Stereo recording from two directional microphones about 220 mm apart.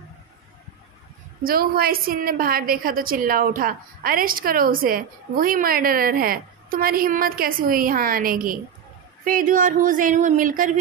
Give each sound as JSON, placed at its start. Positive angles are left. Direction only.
{"t": 1.4, "sound": "a woman's voice", "side_deg": -40}